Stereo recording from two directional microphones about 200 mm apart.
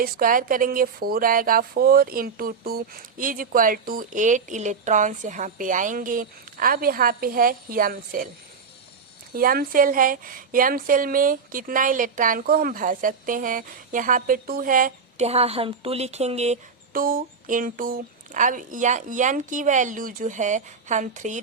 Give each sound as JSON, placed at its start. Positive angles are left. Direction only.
{"t": 0.0, "sound": "speech", "side_deg": -45}
{"t": 9.3, "sound": "speech", "side_deg": -45}
{"t": 16.9, "sound": "speech", "side_deg": -45}